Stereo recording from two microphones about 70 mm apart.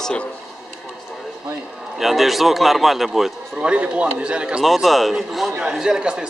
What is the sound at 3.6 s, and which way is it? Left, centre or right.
A man's voice, centre.